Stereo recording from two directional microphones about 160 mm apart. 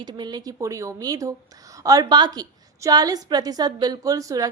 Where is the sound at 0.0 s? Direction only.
30° right (ahead or behind).